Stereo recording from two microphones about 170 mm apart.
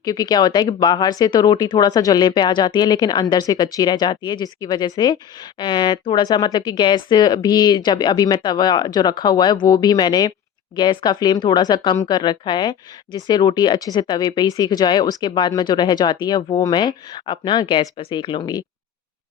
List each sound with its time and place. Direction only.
0.0 s speech: 20° left (ahead or behind)